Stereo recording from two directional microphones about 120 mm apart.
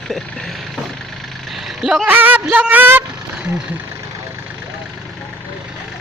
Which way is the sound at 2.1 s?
15° right (ahead or behind).